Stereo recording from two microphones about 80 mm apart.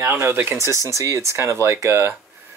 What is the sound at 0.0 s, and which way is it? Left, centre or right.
Speech, right.